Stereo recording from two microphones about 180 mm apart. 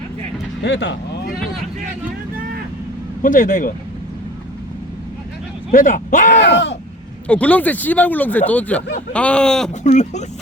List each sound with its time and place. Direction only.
0.6 s speech: 70° left (ahead or behind)
3.2 s speech: 45° left (ahead or behind)
5.7 s speech: 45° left (ahead or behind)
6.4 s speech: 70° left (ahead or behind)
7.3 s speech: 10° left (ahead or behind)
9.8 s speech: 40° left (ahead or behind)